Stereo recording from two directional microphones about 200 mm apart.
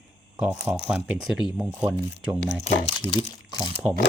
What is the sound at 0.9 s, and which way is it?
Speech, 5° right (ahead or behind).